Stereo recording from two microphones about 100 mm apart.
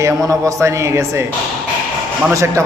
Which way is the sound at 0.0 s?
35° right (ahead or behind).